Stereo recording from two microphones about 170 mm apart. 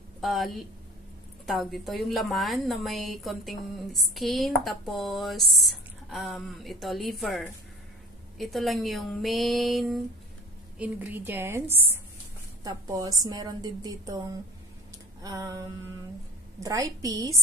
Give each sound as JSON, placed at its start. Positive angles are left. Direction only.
{"t": 0.2, "sound": "a woman's voice", "side_deg": 0}